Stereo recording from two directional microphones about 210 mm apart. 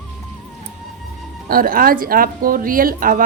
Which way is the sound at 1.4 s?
45° right (ahead or behind).